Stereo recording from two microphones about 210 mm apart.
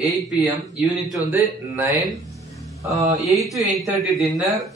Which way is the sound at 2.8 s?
15° right (ahead or behind).